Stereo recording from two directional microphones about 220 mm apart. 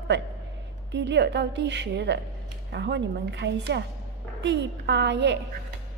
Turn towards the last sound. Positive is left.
turn(degrees=-50)  # may be behind; listen again after turning